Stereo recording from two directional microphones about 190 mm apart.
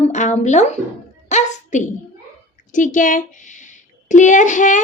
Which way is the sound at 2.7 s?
45° left (ahead or behind).